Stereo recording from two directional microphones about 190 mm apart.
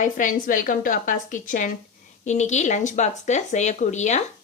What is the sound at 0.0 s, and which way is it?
A woman's voice, 45° left (ahead or behind).